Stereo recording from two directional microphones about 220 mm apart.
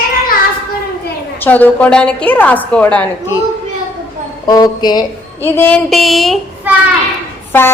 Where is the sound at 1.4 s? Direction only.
5° left (ahead or behind).